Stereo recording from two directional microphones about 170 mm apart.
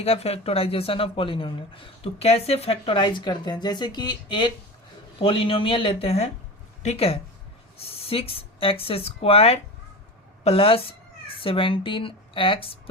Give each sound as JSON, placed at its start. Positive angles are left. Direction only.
{"t": 0.0, "sound": "speech", "side_deg": 35}